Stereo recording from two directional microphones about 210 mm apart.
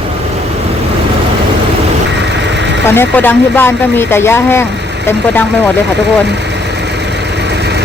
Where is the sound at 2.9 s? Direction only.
10° left (ahead or behind).